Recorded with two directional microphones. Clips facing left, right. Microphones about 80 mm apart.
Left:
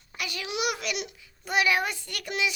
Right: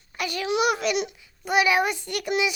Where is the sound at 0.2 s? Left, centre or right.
Right.